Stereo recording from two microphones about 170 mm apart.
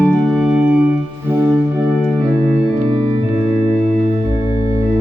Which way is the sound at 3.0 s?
30° right (ahead or behind).